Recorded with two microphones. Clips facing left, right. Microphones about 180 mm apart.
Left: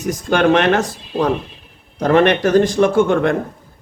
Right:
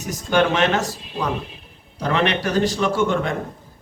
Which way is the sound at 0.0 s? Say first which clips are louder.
Left 4 dB; 55° left (ahead or behind).